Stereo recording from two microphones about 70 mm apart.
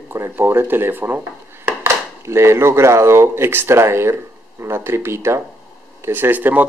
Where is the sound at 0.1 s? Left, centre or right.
Right.